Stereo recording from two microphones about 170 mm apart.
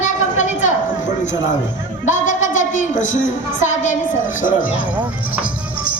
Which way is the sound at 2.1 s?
45° left (ahead or behind).